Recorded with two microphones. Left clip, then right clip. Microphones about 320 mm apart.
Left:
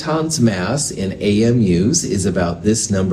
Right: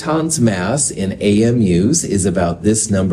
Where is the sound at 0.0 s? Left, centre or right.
Right.